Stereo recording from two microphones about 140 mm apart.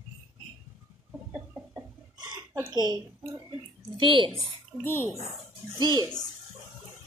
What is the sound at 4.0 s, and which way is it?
Speech, 35° right (ahead or behind).